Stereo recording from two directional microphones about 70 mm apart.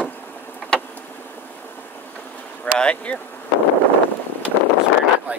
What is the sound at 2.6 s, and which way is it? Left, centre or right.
Speech, centre.